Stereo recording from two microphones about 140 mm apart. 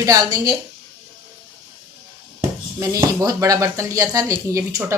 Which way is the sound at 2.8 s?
25° right (ahead or behind).